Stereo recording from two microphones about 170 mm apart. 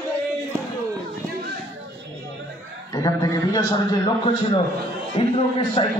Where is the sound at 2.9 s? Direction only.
20° left (ahead or behind).